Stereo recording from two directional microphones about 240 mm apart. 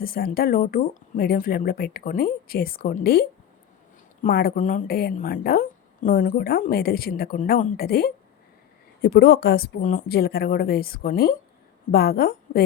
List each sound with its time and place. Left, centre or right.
0.0 s a woman's voice: left